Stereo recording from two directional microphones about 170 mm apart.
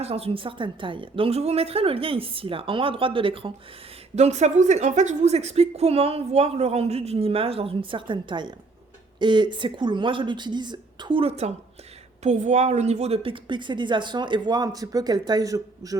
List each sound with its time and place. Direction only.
0.0 s a woman's voice: 35° right (ahead or behind); by 16.0 s 20° right (ahead or behind)